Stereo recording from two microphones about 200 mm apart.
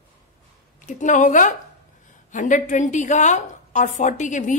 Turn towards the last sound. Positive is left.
turn(degrees=40)  # may be behind; listen again after turning